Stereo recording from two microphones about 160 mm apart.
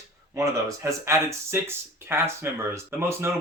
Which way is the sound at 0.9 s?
15° right (ahead or behind).